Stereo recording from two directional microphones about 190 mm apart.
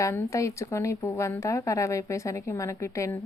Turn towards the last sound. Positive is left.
turn(degrees=15)  # may be behind; listen again after turning